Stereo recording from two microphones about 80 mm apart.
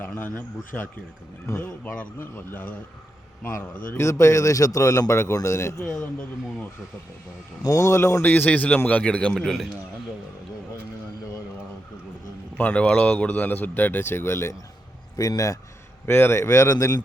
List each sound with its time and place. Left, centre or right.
0.0 s speech: centre; by 5.8 s left
5.9 s a man's voice: centre
7.6 s speech: left
8.2 s a man's voice: left; by 9.6 s centre
12.5 s speech: centre; by 14.5 s left
15.1 s a man's voice: left
16.0 s speech: left